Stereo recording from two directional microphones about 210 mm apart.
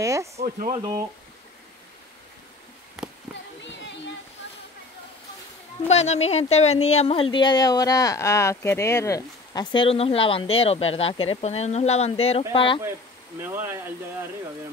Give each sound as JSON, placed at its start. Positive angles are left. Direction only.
{"t": 0.0, "sound": "speech", "side_deg": -15}
{"t": 0.4, "sound": "speech", "side_deg": -30}
{"t": 3.0, "sound": "a sound", "side_deg": -5}
{"t": 5.9, "sound": "speech", "side_deg": 30}
{"t": 13.4, "sound": "speech", "side_deg": -10}